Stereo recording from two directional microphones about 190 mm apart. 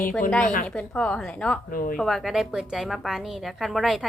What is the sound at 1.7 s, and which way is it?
Speech, 50° left (ahead or behind).